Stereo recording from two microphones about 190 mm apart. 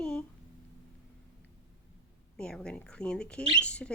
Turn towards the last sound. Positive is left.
turn(degrees=5)  # may be behind; listen again after turning